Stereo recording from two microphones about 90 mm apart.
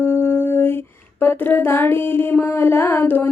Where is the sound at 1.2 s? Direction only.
25° left (ahead or behind).